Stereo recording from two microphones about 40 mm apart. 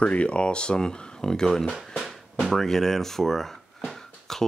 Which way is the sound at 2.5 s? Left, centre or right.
Centre.